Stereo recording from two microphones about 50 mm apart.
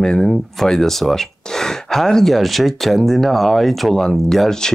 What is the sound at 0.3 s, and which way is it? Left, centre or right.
Speech, centre.